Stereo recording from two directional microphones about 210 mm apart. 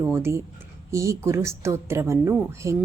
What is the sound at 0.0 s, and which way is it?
A woman's voice, 10° right (ahead or behind).